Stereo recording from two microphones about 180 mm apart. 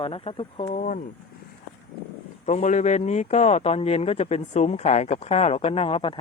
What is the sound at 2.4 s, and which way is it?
Speech, 40° left (ahead or behind).